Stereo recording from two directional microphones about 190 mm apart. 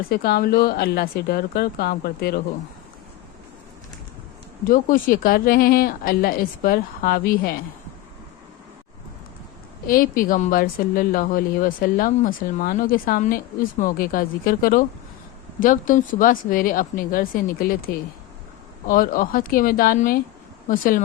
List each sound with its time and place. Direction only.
0.1 s a woman's voice: 55° left (ahead or behind)
4.7 s a woman's voice: 45° left (ahead or behind)
9.8 s a woman's voice: 50° left (ahead or behind)